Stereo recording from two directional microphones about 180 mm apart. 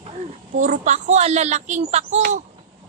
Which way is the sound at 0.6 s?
40° right (ahead or behind).